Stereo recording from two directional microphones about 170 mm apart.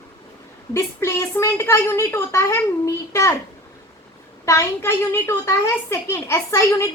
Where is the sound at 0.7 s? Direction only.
15° left (ahead or behind).